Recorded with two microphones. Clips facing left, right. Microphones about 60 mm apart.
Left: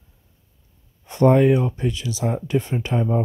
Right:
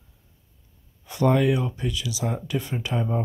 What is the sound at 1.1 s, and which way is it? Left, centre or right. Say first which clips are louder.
Speech: left 5 dB; left.